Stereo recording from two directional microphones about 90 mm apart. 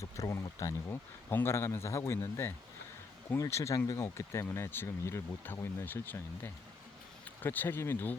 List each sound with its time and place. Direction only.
0.0 s speech: 35° left (ahead or behind)